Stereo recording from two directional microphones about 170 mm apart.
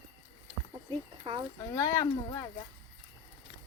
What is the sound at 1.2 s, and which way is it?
Speech, 30° right (ahead or behind).